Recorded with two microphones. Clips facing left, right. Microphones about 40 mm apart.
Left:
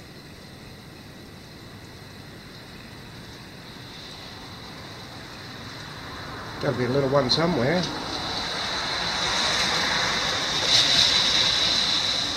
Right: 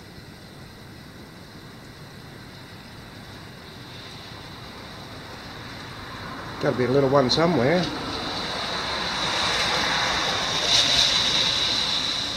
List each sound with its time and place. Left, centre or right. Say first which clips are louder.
5.1 s vehicle: right 1 dB; centre
6.4 s a sound: right 3 dB; centre
7.0 s speech: right 3 dB; centre
7.4 s vehicle: right 3 dB; centre